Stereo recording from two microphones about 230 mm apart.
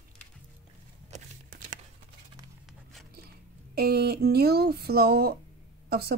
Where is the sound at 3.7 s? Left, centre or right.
Right.